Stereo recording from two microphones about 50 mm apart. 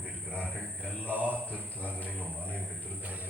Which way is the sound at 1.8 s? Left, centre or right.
Left.